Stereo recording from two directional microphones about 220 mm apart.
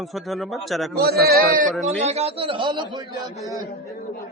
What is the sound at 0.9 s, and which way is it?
Speech, 45° right (ahead or behind).